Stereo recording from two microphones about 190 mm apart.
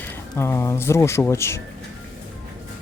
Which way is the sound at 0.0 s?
15° left (ahead or behind).